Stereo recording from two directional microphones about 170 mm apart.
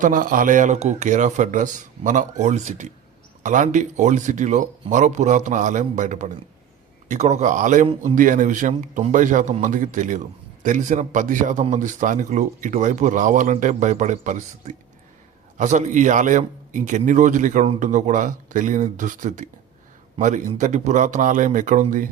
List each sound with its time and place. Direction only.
0.0 s speech: 55° right (ahead or behind)